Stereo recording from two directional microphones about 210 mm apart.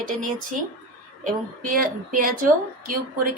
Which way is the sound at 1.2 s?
40° right (ahead or behind).